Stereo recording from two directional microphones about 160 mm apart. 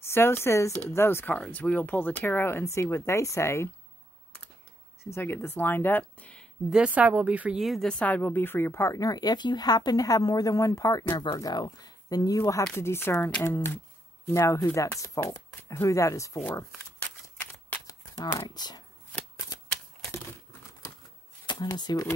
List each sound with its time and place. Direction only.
0.0 s speech: 15° left (ahead or behind)
5.0 s speech: 15° left (ahead or behind)
6.7 s speech: 10° right (ahead or behind); by 16.6 s 20° left (ahead or behind)
17.8 s shuffling cards: 25° left (ahead or behind)
21.5 s speech: 25° left (ahead or behind)